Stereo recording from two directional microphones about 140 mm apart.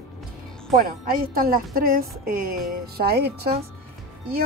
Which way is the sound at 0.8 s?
90° right.